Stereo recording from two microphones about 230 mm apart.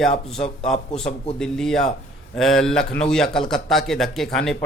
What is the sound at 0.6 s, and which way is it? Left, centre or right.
Speech, centre.